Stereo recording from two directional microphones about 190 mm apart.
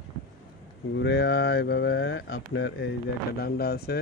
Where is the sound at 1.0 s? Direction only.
60° left (ahead or behind); by 2.8 s 80° left.